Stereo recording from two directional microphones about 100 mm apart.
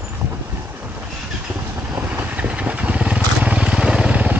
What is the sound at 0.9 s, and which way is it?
Vehicle, 10° right (ahead or behind).